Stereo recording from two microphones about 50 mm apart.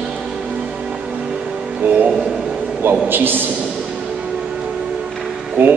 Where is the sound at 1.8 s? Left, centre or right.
Right.